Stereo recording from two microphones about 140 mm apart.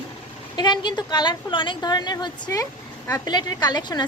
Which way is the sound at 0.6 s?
30° left (ahead or behind).